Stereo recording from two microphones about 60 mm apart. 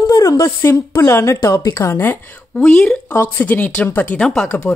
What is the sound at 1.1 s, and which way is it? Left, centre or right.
Speech, left.